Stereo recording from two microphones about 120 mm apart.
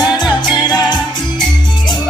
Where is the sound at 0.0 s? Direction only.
35° left (ahead or behind).